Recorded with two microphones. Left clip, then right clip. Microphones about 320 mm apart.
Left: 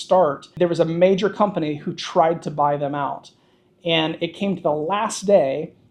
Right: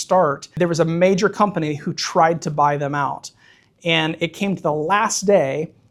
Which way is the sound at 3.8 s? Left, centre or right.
Right.